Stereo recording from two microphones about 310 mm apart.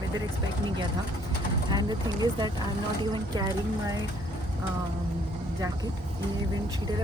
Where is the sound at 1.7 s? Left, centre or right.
Centre.